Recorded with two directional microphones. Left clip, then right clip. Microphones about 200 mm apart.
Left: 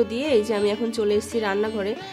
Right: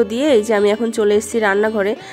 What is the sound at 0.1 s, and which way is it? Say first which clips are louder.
A woman's voice: right 7 dB; 25° right (ahead or behind).